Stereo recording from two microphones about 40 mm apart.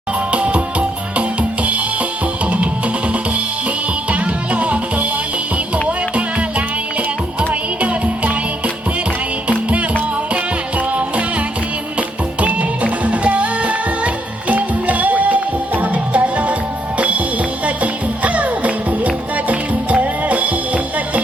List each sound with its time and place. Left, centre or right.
0.3 s music: right
4.1 s music: right
7.8 s music: right
12.8 s music: right